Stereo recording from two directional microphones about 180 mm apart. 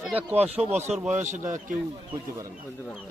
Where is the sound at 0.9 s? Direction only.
Centre (ahead or behind).